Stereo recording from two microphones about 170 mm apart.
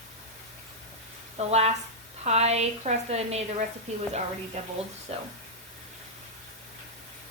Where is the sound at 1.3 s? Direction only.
40° right (ahead or behind).